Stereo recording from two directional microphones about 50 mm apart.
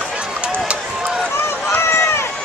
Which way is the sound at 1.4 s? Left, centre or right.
Left.